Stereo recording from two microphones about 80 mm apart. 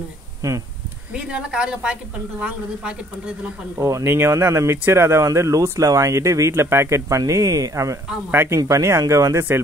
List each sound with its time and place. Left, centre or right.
0.4 s speech: right
1.1 s speech: centre
3.7 s speech: right
4.0 s speech: right
8.3 s speech: right
8.5 s speech: right